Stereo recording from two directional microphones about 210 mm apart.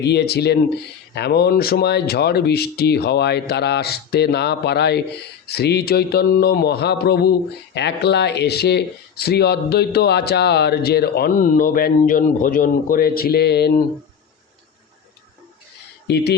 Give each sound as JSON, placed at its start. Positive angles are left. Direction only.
{"t": 0.0, "sound": "speech", "side_deg": 50}
{"t": 16.0, "sound": "speech", "side_deg": 55}